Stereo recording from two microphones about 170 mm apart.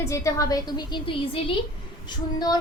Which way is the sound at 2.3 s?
25° left (ahead or behind).